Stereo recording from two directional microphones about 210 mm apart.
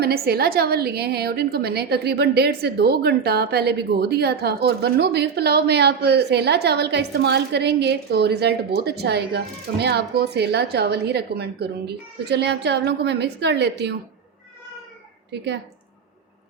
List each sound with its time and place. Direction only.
0.0 s a woman's voice: 50° right (ahead or behind)
15.3 s a woman's voice: 55° right (ahead or behind)